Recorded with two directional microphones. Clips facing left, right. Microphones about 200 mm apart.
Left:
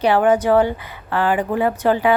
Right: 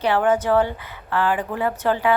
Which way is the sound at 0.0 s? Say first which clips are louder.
Left 4 dB; 15° left (ahead or behind).